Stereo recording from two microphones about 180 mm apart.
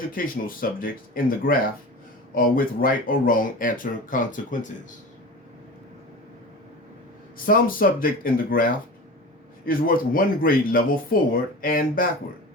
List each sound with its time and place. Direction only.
0.1 s speech: 50° left (ahead or behind)
7.4 s speech: 50° left (ahead or behind)